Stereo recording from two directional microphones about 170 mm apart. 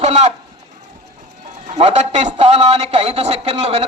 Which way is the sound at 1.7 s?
40° right (ahead or behind).